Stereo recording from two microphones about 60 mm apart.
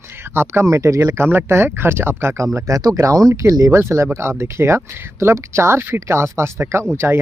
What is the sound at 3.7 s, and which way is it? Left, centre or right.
Speech, right.